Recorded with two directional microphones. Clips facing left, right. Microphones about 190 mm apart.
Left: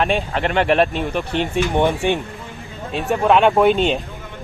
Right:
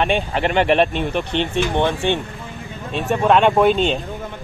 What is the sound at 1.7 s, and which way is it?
Speech, 15° left (ahead or behind).